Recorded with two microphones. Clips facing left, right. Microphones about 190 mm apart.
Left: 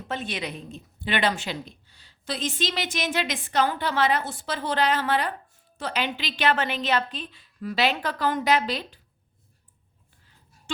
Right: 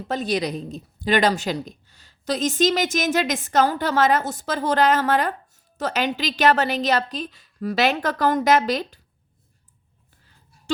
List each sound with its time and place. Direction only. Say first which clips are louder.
0.1 s a woman's voice: right 8 dB; 40° right (ahead or behind)